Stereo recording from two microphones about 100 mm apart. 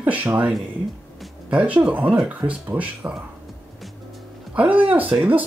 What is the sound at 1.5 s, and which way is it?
Speech, 15° right (ahead or behind).